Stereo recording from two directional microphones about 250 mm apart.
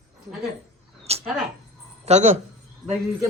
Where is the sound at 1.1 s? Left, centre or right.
Right.